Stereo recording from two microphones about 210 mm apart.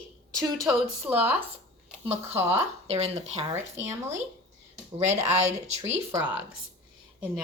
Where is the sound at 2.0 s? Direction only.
30° right (ahead or behind).